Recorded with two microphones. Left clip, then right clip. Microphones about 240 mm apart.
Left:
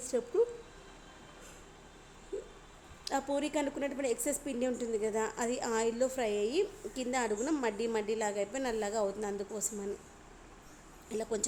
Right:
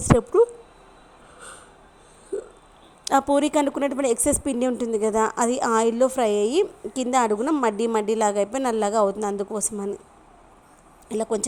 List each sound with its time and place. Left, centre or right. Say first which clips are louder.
0.1 s speech: right 13 dB; right
3.0 s a woman's voice: right 14 dB; right
11.1 s a woman's voice: right 11 dB; right